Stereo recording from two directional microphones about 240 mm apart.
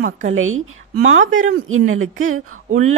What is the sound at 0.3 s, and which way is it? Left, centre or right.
Speech, right.